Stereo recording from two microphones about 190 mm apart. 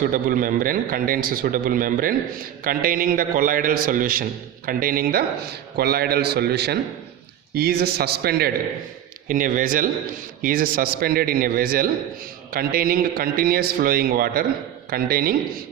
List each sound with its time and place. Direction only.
0.0 s a man's voice: 50° right (ahead or behind)
9.2 s a man's voice: 45° right (ahead or behind)